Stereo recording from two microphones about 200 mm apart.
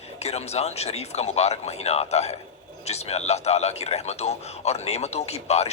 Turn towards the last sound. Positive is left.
turn(degrees=30)  # may be behind; listen again after turning